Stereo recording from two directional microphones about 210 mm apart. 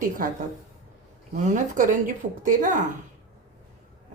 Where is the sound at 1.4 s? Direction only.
35° right (ahead or behind).